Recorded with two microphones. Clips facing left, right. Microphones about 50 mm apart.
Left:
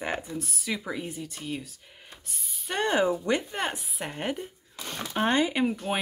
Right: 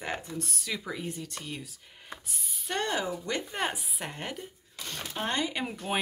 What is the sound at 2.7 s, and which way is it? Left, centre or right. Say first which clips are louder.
Speech: left 4 dB; left.